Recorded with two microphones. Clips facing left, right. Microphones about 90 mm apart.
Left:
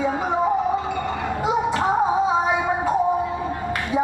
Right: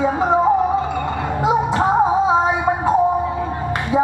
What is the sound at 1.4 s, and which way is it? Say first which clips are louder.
Music: right 5 dB; 20° right (ahead or behind).